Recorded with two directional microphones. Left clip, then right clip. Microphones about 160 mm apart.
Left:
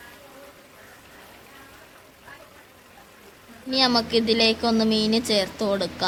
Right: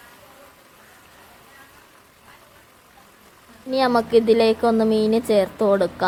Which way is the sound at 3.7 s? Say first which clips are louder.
Right 3 dB; 25° right (ahead or behind).